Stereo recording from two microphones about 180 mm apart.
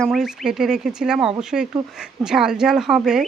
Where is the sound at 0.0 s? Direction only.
Centre (ahead or behind).